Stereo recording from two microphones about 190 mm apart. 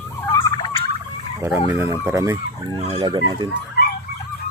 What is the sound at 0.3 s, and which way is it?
Turkey, 20° left (ahead or behind).